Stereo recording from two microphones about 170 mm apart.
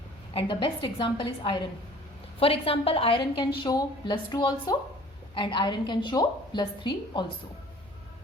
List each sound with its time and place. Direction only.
0.3 s a woman's voice: 30° left (ahead or behind)